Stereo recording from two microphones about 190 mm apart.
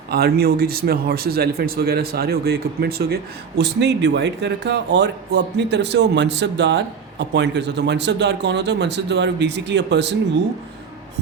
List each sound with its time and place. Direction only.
0.1 s speech: 55° right (ahead or behind)